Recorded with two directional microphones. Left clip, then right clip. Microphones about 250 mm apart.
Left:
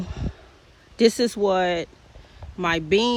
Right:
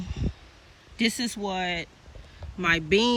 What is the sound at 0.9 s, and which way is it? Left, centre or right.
Speech, centre.